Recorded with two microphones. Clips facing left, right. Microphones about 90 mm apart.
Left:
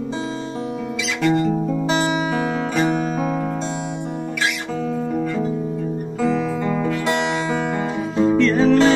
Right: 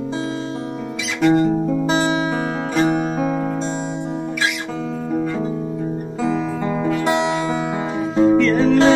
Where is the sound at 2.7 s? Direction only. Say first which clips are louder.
Right 3 dB; 20° right (ahead or behind).